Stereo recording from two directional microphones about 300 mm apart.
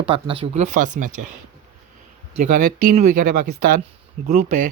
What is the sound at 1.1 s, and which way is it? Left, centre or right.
Speech, right.